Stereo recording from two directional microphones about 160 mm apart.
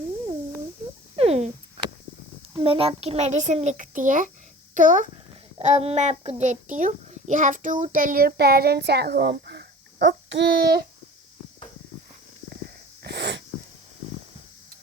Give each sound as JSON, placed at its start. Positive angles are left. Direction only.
{"t": 1.1, "sound": "a sound", "side_deg": -40}
{"t": 2.5, "sound": "a child's voice", "side_deg": -35}
{"t": 5.5, "sound": "a child's voice", "side_deg": -40}
{"t": 13.0, "sound": "wheeze", "side_deg": -90}